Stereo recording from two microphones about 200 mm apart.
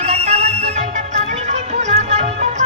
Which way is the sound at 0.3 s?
30° right (ahead or behind).